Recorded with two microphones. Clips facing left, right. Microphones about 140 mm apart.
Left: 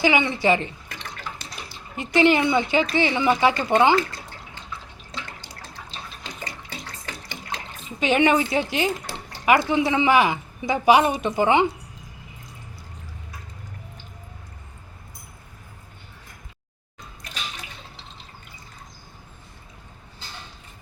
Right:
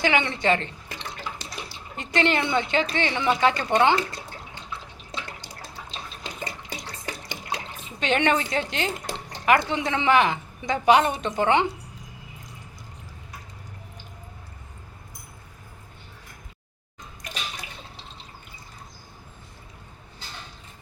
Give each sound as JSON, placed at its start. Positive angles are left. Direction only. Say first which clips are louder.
{"t": 0.0, "sound": "a woman's voice", "louder": "left 3 dB", "side_deg": 5}
{"t": 2.0, "sound": "a woman's voice", "louder": "left 5 dB", "side_deg": 5}
{"t": 6.2, "sound": "water", "louder": "right 4 dB", "side_deg": -15}
{"t": 7.9, "sound": "a woman's voice", "louder": "left 4 dB", "side_deg": 5}